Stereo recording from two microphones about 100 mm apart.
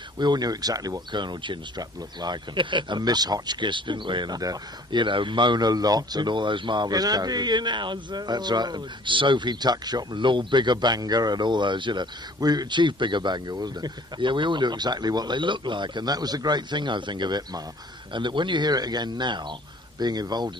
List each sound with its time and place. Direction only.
0.2 s speech: 45° right (ahead or behind)
5.0 s speech: 55° right (ahead or behind)
18.1 s speech: 50° right (ahead or behind)